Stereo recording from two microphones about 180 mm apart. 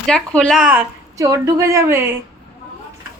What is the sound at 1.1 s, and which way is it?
Speech, 20° right (ahead or behind).